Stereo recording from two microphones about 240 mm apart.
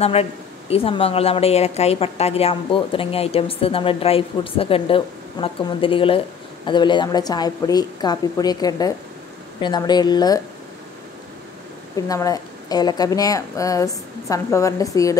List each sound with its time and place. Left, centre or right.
0.0 s speech: left
12.1 s speech: centre